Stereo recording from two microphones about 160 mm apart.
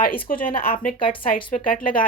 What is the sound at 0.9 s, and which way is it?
Speech, 30° left (ahead or behind).